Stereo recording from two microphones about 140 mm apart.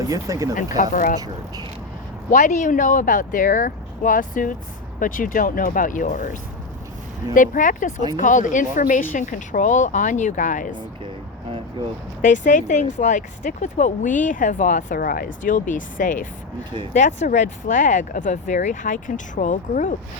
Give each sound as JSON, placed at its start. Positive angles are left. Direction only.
{"t": 0.0, "sound": "speech", "side_deg": -25}
{"t": 0.8, "sound": "speech", "side_deg": 75}
{"t": 2.3, "sound": "speech", "side_deg": 65}
{"t": 7.3, "sound": "speech", "side_deg": 70}
{"t": 9.1, "sound": "speech", "side_deg": 65}
{"t": 12.2, "sound": "speech", "side_deg": 65}
{"t": 16.9, "sound": "speech", "side_deg": 55}